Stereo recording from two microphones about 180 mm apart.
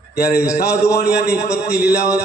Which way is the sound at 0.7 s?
15° left (ahead or behind).